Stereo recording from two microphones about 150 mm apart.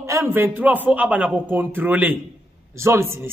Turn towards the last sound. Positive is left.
turn(degrees=-15)  # may be behind; listen again after turning